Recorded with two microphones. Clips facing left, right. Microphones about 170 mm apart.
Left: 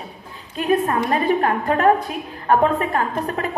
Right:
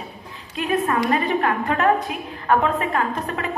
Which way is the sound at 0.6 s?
30° left (ahead or behind).